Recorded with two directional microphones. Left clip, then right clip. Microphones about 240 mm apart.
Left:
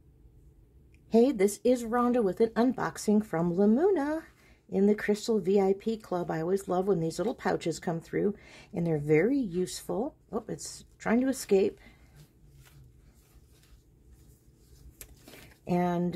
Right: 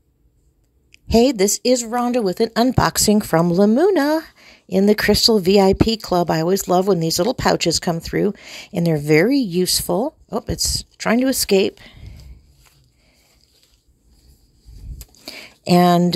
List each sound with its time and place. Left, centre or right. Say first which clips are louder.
0.9 s speech: right 9 dB; right
15.6 s speech: right 15 dB; right